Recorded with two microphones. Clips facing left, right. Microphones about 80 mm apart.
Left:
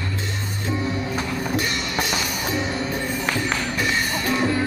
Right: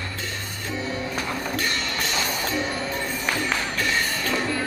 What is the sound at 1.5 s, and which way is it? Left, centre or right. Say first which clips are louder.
Music: left 3 dB; centre.